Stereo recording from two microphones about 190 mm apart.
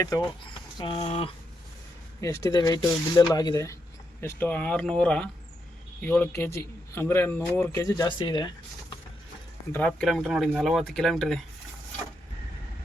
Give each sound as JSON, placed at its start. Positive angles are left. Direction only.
{"t": 0.0, "sound": "speech", "side_deg": 15}
{"t": 0.8, "sound": "speech", "side_deg": 30}
{"t": 2.2, "sound": "speech", "side_deg": 15}
{"t": 9.7, "sound": "speech", "side_deg": 5}